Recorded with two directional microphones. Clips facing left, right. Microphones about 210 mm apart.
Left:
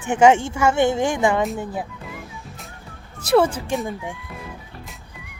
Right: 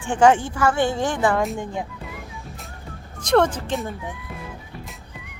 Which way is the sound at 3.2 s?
5° left (ahead or behind).